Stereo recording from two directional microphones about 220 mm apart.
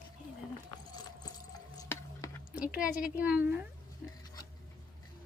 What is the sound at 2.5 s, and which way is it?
Speech, 5° right (ahead or behind).